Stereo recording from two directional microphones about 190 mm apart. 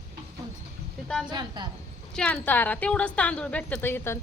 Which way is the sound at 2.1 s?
5° left (ahead or behind).